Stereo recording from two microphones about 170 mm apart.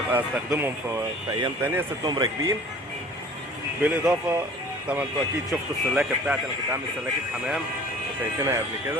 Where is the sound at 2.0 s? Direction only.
25° right (ahead or behind).